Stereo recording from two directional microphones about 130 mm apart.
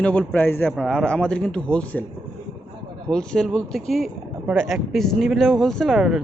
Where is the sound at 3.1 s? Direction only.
5° left (ahead or behind).